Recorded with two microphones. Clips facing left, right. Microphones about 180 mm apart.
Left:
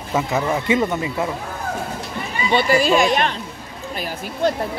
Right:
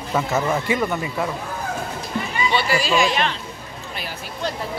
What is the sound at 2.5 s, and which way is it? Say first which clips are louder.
Speech: left 6 dB; 50° left (ahead or behind).